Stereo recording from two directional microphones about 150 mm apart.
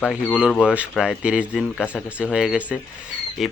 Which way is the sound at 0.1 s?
5° right (ahead or behind).